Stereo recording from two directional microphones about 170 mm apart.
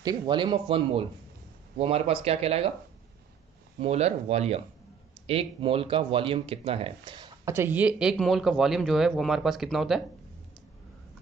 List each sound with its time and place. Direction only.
0.0 s speech: 25° right (ahead or behind)
3.8 s speech: 40° right (ahead or behind)
7.5 s speech: 10° right (ahead or behind)